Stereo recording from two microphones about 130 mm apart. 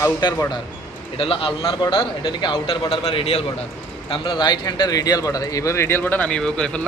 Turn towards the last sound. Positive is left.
turn(degrees=5)  # may be behind; listen again after turning